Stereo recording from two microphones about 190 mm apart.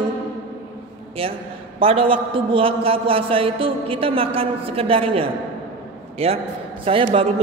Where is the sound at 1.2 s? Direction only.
30° right (ahead or behind).